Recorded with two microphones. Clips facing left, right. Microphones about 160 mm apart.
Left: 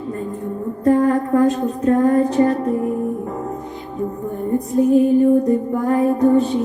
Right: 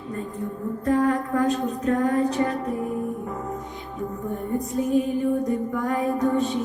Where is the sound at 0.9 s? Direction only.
40° left (ahead or behind).